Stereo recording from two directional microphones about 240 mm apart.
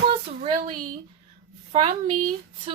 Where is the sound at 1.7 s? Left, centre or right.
Right.